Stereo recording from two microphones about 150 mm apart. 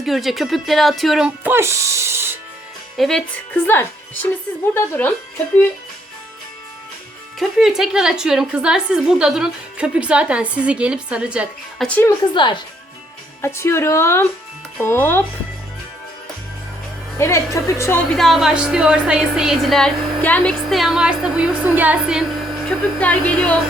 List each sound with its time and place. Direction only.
0.0 s speech: centre (ahead or behind)
1.5 s speech: 15° right (ahead or behind)
3.0 s speech: 5° left (ahead or behind)
7.3 s speech: centre (ahead or behind)
11.9 s speech: 10° left (ahead or behind)
12.3 s speech: 30° left (ahead or behind)
13.4 s speech: 15° left (ahead or behind)
17.2 s a woman's voice: 20° left (ahead or behind)
18.1 s speech: centre (ahead or behind)